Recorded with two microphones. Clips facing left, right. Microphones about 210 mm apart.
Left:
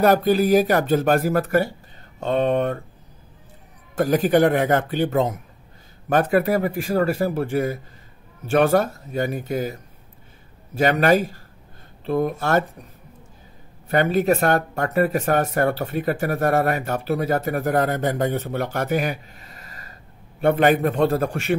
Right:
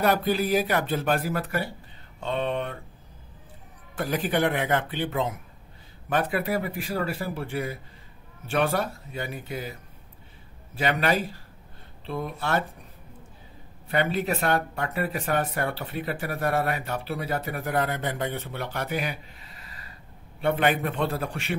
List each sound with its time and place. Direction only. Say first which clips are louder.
0.0 s speech: left 7 dB; 45° left (ahead or behind)
3.9 s speech: left 9 dB; 45° left (ahead or behind)
13.8 s speech: left 7 dB; 45° left (ahead or behind)